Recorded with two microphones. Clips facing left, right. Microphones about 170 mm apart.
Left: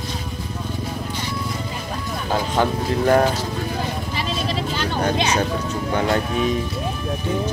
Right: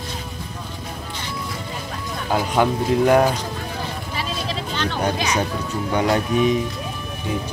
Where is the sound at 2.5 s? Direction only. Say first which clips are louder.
Right 4 dB; 10° right (ahead or behind).